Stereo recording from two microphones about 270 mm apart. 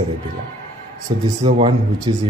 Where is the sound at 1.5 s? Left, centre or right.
Centre.